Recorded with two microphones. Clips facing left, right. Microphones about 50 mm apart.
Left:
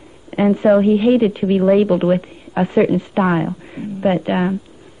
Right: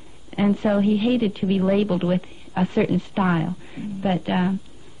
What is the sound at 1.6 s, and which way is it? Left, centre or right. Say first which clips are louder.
A woman's voice: left 8 dB; centre.